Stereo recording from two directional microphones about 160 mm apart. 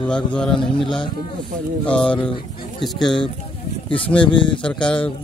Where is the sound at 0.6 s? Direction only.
30° left (ahead or behind).